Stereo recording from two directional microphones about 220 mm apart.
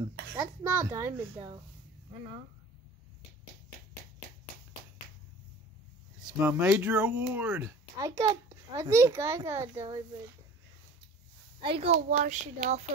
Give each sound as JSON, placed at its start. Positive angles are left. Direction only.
{"t": 0.7, "sound": "speech", "side_deg": -10}
{"t": 6.2, "sound": "speech", "side_deg": -5}
{"t": 11.6, "sound": "a child's voice", "side_deg": -25}